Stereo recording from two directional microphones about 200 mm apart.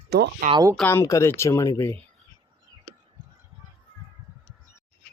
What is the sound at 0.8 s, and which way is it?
Speech, 10° left (ahead or behind).